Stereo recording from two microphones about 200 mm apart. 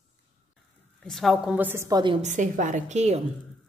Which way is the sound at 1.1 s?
Centre (ahead or behind).